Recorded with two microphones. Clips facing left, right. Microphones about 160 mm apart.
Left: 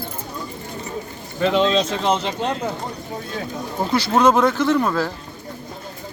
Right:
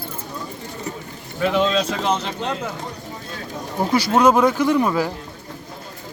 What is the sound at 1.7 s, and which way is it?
Speech, 30° left (ahead or behind).